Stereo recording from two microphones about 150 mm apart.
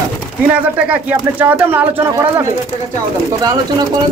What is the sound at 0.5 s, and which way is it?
Speech, 10° right (ahead or behind).